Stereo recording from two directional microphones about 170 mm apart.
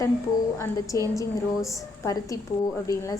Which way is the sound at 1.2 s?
20° left (ahead or behind).